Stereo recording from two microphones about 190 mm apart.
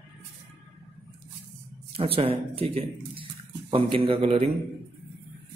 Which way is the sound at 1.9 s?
30° right (ahead or behind).